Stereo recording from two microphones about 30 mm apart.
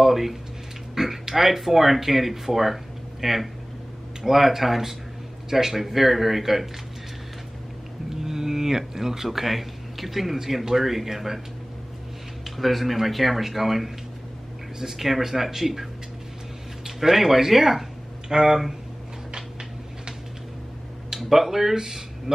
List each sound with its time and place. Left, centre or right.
0.0 s a sound: centre
0.9 s speech: centre
8.2 s speech: centre
12.4 s speech: centre
18.3 s speech: right
21.3 s speech: centre